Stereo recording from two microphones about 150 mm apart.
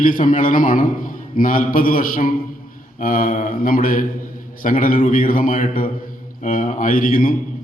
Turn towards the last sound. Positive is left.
turn(degrees=70)  # may be behind; listen again after turning